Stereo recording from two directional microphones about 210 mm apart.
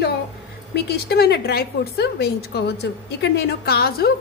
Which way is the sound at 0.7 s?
50° left (ahead or behind).